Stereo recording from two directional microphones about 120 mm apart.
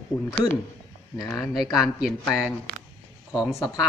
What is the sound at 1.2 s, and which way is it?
Speech, 30° left (ahead or behind).